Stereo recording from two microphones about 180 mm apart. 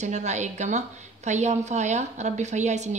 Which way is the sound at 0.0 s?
40° right (ahead or behind).